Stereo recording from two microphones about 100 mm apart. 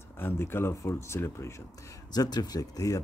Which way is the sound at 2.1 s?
40° left (ahead or behind).